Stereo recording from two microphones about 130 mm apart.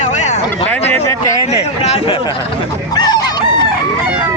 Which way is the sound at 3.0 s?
30° left (ahead or behind).